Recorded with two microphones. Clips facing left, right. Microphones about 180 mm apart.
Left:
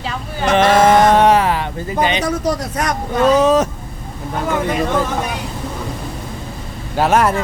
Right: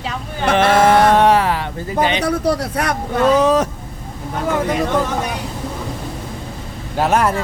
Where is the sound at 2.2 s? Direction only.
60° right (ahead or behind).